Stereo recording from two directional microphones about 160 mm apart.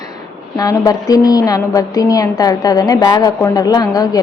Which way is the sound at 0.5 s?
20° left (ahead or behind).